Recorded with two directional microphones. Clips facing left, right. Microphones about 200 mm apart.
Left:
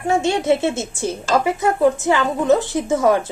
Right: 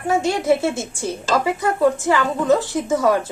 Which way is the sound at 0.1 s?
25° left (ahead or behind).